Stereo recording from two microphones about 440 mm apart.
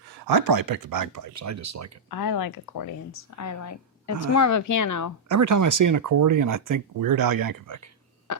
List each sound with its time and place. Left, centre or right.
0.1 s speech: right
2.0 s speech: left
5.3 s speech: right